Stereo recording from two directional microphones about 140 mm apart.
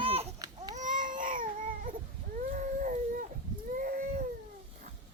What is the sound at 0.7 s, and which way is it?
Baby cry, 65° right (ahead or behind).